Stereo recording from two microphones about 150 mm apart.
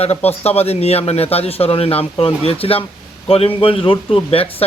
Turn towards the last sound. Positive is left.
turn(degrees=40)  # may be behind; listen again after turning